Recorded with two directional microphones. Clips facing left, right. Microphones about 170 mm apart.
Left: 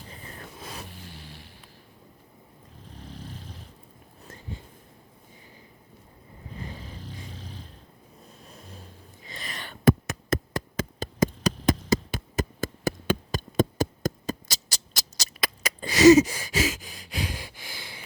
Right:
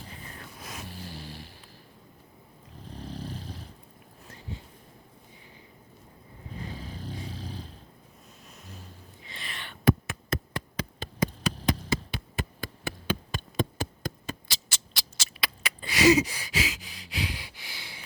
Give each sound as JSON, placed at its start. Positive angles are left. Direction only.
{"t": 1.0, "sound": "vehicle", "side_deg": -35}
{"t": 3.0, "sound": "vehicle", "side_deg": -35}
{"t": 7.0, "sound": "vehicle", "side_deg": -35}
{"t": 9.2, "sound": "a sound", "side_deg": 40}